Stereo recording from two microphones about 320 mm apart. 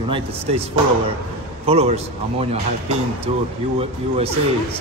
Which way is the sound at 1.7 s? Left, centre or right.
Centre.